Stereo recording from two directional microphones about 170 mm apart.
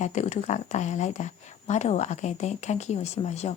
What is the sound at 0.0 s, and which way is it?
Speech, 45° left (ahead or behind).